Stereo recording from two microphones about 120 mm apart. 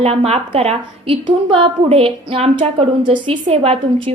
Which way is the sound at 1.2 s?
50° right (ahead or behind).